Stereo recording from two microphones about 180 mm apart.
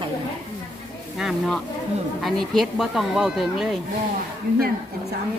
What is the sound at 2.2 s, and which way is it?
Speech, centre (ahead or behind).